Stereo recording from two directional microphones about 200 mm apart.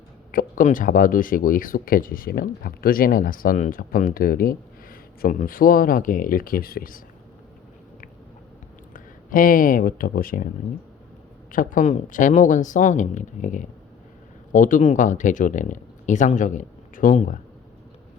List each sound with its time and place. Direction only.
0.3 s speech: 45° left (ahead or behind)
8.9 s speech: 45° left (ahead or behind)
11.5 s speech: 40° left (ahead or behind)